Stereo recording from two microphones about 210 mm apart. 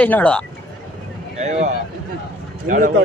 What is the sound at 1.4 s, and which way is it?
Speech, 35° right (ahead or behind).